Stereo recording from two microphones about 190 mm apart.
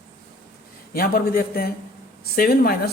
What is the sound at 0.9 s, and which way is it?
Speech, 50° left (ahead or behind).